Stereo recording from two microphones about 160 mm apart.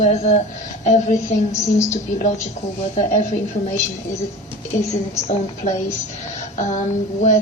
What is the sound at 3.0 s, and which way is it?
Speech, 50° left (ahead or behind).